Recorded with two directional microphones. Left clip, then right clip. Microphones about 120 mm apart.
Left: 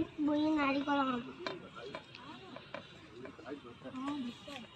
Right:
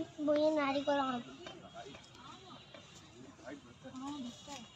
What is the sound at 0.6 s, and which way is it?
Speech, 20° right (ahead or behind).